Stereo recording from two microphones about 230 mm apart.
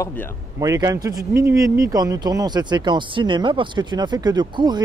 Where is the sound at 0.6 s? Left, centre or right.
Centre.